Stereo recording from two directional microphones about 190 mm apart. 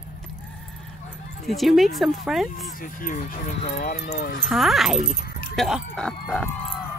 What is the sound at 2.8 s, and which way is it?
Speech, 45° left (ahead or behind).